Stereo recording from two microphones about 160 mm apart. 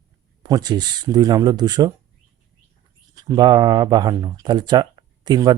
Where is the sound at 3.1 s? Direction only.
25° right (ahead or behind).